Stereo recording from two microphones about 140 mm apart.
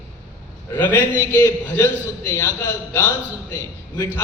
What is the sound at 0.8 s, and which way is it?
A man's voice, 15° left (ahead or behind).